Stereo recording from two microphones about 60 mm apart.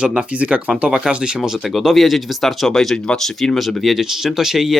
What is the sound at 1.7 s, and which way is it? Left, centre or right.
Speech, centre.